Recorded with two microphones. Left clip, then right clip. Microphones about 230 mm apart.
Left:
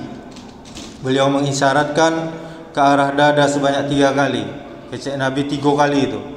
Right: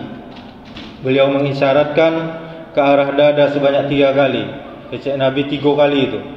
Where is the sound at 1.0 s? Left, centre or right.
Left.